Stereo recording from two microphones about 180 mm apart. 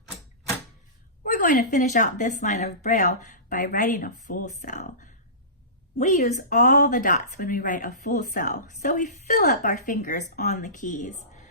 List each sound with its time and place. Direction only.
1.2 s speech: 50° left (ahead or behind)